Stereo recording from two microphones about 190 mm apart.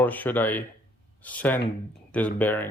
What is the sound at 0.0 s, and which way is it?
Speech, 10° left (ahead or behind).